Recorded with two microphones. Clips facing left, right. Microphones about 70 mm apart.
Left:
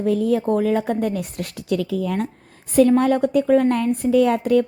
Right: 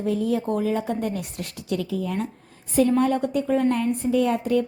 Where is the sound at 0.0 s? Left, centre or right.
Left.